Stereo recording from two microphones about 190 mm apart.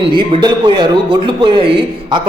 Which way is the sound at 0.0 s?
25° right (ahead or behind).